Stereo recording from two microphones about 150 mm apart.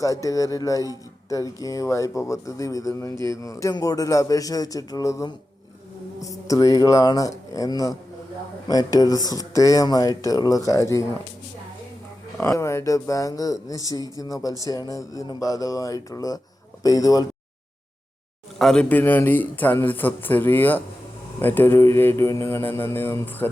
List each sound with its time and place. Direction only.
0.0 s speech: 20° left (ahead or behind)
12.4 s speech: 20° left (ahead or behind)
18.6 s a man's voice: 5° left (ahead or behind)